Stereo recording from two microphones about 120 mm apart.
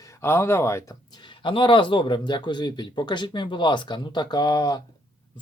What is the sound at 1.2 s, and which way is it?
Speech, 45° left (ahead or behind).